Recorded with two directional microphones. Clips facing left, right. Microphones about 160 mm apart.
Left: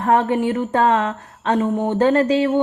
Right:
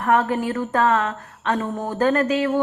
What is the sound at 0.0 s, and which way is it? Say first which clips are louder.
Speech: left 3 dB; 30° left (ahead or behind).